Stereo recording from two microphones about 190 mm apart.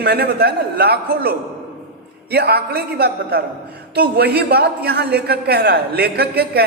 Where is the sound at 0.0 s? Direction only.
55° right (ahead or behind).